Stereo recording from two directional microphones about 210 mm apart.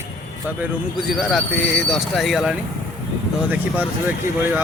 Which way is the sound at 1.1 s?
Centre (ahead or behind).